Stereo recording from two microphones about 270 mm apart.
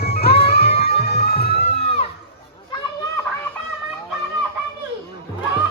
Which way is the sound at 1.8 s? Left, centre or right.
Left.